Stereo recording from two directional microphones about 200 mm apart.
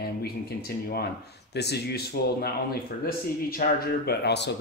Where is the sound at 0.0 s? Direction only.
50° left (ahead or behind).